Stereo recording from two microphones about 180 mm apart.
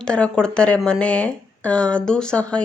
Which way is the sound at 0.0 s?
5° left (ahead or behind).